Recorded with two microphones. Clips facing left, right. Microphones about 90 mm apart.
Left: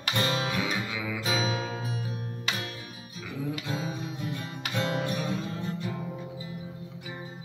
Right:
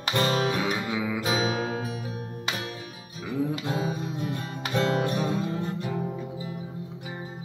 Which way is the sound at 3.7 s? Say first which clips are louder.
Right 5 dB; 45° right (ahead or behind).